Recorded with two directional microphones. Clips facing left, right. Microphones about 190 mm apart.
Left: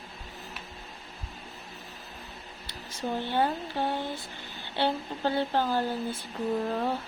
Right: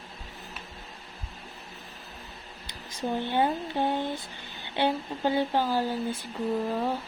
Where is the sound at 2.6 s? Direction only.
15° right (ahead or behind).